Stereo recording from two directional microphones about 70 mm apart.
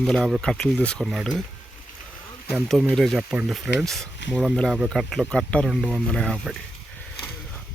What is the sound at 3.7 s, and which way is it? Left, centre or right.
Speech, centre.